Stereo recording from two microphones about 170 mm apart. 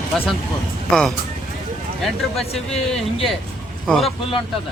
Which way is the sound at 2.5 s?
35° left (ahead or behind).